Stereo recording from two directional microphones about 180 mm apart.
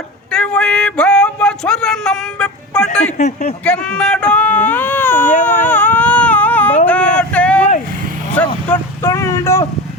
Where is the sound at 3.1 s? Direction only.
35° left (ahead or behind).